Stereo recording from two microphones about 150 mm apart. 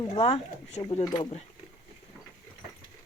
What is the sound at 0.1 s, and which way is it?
Speech, 45° left (ahead or behind).